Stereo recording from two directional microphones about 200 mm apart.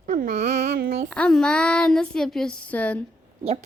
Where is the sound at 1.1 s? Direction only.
5° left (ahead or behind).